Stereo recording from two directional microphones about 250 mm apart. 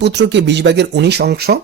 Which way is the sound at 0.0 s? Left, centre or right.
Right.